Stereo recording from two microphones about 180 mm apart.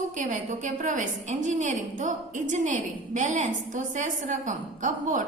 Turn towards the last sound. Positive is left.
turn(degrees=-45)  # may be behind; listen again after turning